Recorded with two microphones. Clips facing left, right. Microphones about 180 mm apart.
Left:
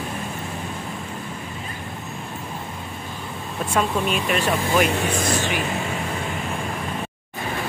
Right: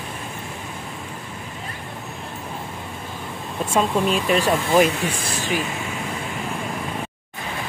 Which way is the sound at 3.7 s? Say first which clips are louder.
Right 2 dB; 30° right (ahead or behind).